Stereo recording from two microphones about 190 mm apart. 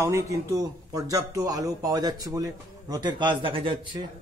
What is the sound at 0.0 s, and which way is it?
Speech, 15° right (ahead or behind).